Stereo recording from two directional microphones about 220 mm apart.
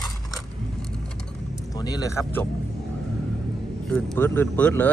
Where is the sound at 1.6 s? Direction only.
15° left (ahead or behind).